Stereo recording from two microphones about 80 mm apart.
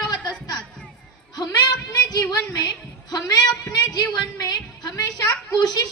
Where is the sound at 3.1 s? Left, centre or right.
Left.